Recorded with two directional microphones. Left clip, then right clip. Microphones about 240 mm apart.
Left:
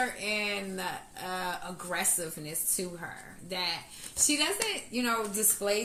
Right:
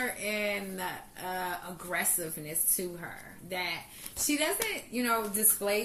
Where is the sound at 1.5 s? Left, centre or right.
Left.